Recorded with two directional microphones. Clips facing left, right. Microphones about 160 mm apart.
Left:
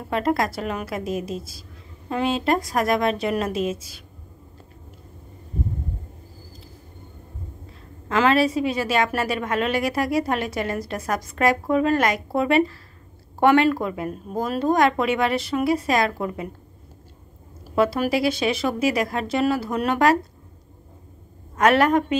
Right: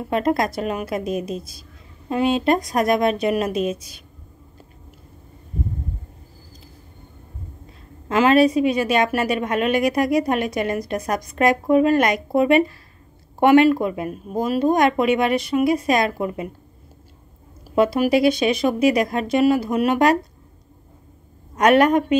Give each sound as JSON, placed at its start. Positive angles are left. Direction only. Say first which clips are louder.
{"t": 0.1, "sound": "a woman's voice", "louder": "right 2 dB", "side_deg": -20}
{"t": 8.1, "sound": "a woman's voice", "louder": "right 4 dB", "side_deg": -20}
{"t": 17.7, "sound": "a woman's voice", "louder": "right 4 dB", "side_deg": -15}
{"t": 21.5, "sound": "a woman's voice", "louder": "right 3 dB", "side_deg": -15}